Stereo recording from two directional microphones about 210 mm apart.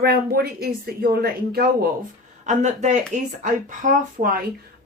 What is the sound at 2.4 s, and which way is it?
Speech, 35° right (ahead or behind).